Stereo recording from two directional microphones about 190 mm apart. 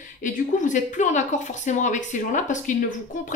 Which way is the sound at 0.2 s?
45° left (ahead or behind).